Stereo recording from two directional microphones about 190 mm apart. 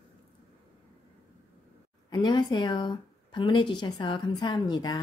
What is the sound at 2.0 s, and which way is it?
Speech, 20° left (ahead or behind).